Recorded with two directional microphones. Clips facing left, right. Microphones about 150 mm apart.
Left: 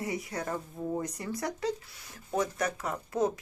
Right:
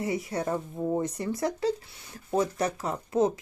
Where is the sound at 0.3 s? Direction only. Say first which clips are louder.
Right 5 dB; 25° right (ahead or behind).